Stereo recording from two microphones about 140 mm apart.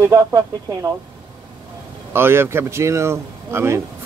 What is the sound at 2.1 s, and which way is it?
Speech, 15° right (ahead or behind).